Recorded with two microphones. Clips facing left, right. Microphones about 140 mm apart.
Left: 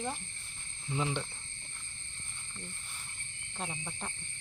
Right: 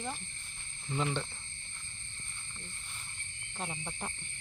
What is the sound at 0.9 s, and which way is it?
Speech, 10° left (ahead or behind).